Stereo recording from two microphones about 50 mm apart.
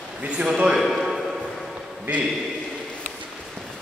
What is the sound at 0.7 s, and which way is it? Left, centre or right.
Speech, centre.